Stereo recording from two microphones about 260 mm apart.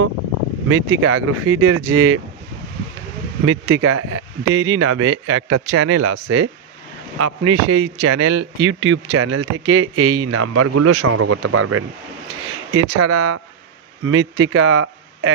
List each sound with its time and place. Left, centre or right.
0.7 s speech: right
3.4 s speech: right
6.0 s speech: right
8.5 s speech: right
14.0 s a man's voice: right